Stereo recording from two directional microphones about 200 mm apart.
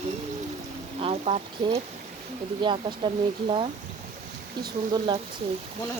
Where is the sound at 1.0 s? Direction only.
30° right (ahead or behind).